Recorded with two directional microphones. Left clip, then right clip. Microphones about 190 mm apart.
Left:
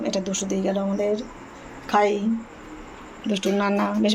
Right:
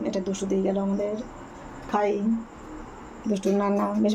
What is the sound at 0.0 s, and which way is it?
Speech, centre (ahead or behind).